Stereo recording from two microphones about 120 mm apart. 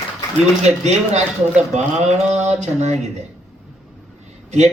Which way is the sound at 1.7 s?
65° right (ahead or behind).